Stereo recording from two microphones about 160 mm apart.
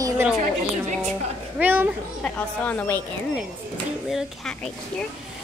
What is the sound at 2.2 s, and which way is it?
Speech, 10° left (ahead or behind).